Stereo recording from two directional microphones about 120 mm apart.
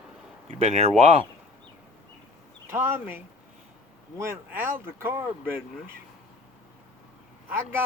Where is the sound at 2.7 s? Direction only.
20° right (ahead or behind).